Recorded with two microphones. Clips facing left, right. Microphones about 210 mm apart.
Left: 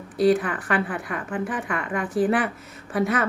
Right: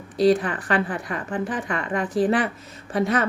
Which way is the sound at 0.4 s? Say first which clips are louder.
Right 1 dB; 35° right (ahead or behind).